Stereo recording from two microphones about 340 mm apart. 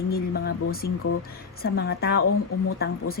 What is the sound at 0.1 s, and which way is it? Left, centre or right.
Speech, left.